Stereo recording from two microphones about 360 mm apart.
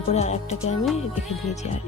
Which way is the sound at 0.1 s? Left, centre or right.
Centre.